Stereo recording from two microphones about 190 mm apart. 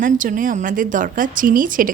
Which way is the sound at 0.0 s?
45° right (ahead or behind).